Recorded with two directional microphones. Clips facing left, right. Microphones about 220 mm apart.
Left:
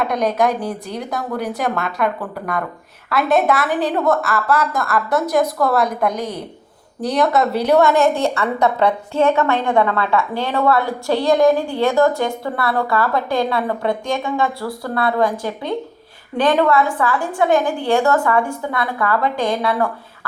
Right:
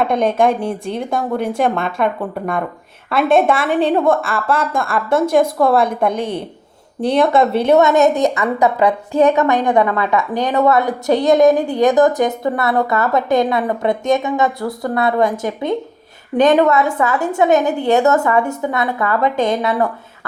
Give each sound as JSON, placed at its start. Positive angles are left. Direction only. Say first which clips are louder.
{"t": 0.0, "sound": "a woman's voice", "louder": "right 3 dB", "side_deg": -25}